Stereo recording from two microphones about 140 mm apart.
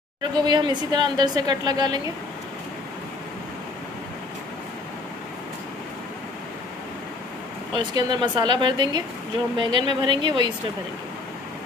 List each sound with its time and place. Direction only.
0.2 s speech: 30° right (ahead or behind)
7.7 s speech: 30° right (ahead or behind)